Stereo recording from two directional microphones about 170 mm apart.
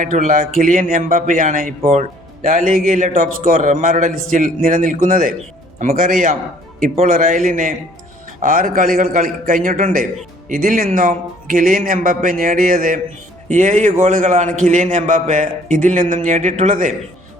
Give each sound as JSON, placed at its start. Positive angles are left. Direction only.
{"t": 0.0, "sound": "a man's voice", "side_deg": -50}